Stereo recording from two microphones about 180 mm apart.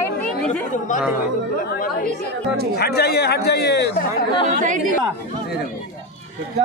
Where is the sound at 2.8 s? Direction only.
65° left (ahead or behind).